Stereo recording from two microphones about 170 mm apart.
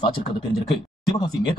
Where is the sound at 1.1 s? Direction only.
25° left (ahead or behind).